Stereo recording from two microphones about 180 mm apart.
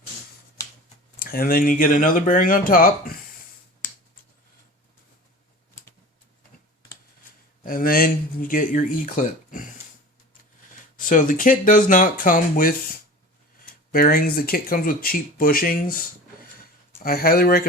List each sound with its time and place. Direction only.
1.2 s speech: 55° left (ahead or behind)
7.6 s speech: 55° left (ahead or behind)
10.9 s speech: 45° left (ahead or behind)
13.9 s speech: 55° left (ahead or behind)
17.0 s speech: 55° left (ahead or behind)